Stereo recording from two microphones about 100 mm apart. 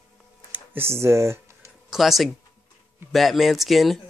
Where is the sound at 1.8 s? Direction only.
Centre (ahead or behind).